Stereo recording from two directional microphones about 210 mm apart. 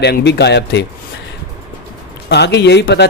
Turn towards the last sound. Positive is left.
turn(degrees=55)  # may be behind; listen again after turning